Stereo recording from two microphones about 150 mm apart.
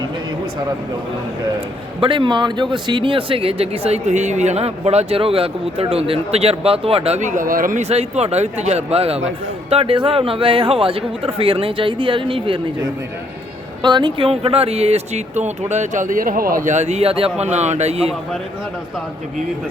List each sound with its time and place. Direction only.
2.0 s speech: 35° right (ahead or behind); by 7.8 s 65° right (ahead or behind)
7.8 s speech: 45° right (ahead or behind)
13.8 s speech: 30° right (ahead or behind)